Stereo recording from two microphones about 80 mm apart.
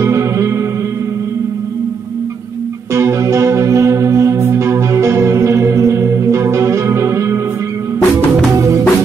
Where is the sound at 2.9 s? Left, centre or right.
Right.